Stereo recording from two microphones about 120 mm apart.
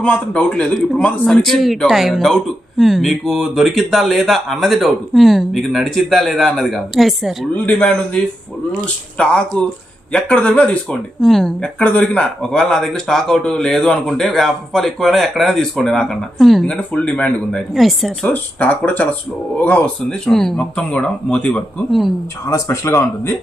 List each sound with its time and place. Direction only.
0.0 s speech: 10° left (ahead or behind)
7.5 s speech: 10° left (ahead or behind)
17.7 s speech: centre (ahead or behind)
18.3 s speech: 10° left (ahead or behind)
22.4 s speech: 25° left (ahead or behind)